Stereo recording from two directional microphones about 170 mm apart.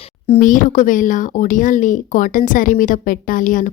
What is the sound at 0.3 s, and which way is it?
Speech, 50° left (ahead or behind).